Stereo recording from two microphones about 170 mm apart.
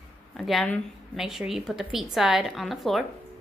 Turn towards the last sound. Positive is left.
turn(degrees=0)  # may be behind; listen again after turning